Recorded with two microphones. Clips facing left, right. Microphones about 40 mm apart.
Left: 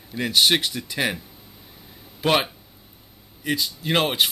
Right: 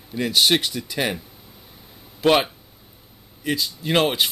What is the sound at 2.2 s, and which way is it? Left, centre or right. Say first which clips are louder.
Speech: right 3 dB; centre.